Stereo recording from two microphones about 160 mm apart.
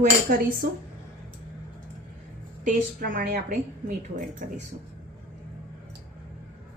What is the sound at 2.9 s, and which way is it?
A woman's voice, 55° right (ahead or behind).